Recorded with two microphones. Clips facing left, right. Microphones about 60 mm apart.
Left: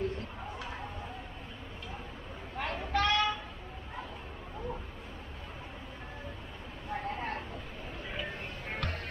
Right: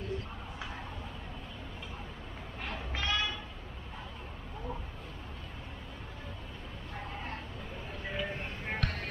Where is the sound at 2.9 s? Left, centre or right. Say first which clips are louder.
Left 6 dB; left.